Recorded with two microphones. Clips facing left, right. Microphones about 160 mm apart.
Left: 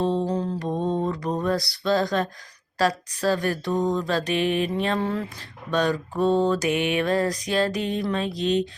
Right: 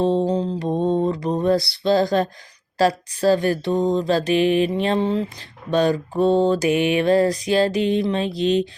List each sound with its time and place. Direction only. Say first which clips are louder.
0.0 s music: right 5 dB; 30° right (ahead or behind)
0.3 s mantra: right 4 dB; 20° right (ahead or behind)